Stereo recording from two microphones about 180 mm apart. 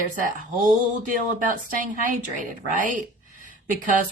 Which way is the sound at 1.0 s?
50° right (ahead or behind).